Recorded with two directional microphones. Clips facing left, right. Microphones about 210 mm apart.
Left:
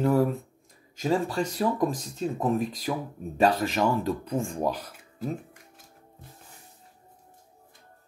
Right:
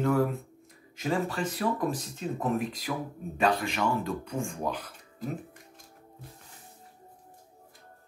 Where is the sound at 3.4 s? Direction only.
40° left (ahead or behind).